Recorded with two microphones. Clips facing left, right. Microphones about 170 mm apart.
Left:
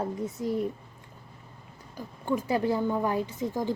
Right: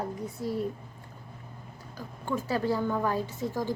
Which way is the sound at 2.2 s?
15° left (ahead or behind).